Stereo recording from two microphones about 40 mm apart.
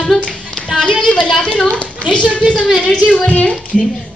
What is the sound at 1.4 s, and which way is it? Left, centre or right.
A man's voice, left.